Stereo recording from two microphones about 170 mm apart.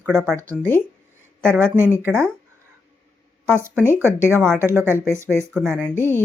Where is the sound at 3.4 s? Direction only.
15° right (ahead or behind).